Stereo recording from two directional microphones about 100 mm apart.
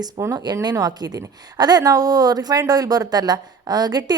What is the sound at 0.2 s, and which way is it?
A woman's voice, 40° right (ahead or behind).